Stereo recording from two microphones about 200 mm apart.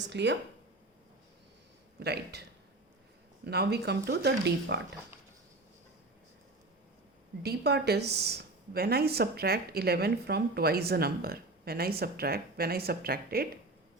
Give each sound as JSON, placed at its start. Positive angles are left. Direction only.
{"t": 0.0, "sound": "speech", "side_deg": -60}
{"t": 2.0, "sound": "a woman's voice", "side_deg": -55}
{"t": 7.4, "sound": "a woman's voice", "side_deg": -55}